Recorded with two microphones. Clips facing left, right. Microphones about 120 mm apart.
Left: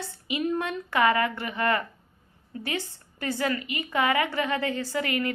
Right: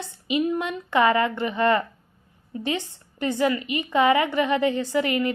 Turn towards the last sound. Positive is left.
turn(degrees=-20)  # may be behind; listen again after turning